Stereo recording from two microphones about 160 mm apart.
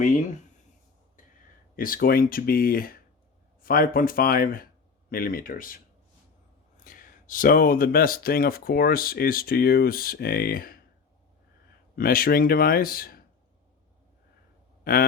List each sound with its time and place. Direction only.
1.7 s speech: 60° left (ahead or behind)
6.8 s speech: 60° left (ahead or behind)
11.9 s speech: 65° left (ahead or behind)